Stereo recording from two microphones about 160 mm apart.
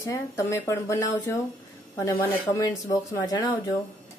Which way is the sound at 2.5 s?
20° left (ahead or behind).